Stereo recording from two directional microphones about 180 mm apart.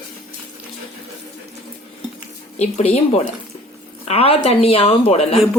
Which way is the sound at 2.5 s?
35° left (ahead or behind).